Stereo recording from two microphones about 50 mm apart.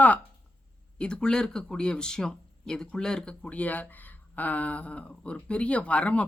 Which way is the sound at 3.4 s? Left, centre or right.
Left.